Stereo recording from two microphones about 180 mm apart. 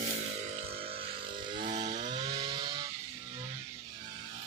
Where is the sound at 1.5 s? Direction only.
35° right (ahead or behind).